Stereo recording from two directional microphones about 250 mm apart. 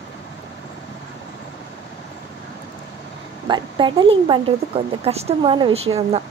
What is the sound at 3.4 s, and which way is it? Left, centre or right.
Speech, centre.